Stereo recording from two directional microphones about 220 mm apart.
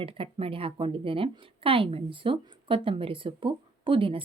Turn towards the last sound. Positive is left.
turn(degrees=-25)  # may be behind; listen again after turning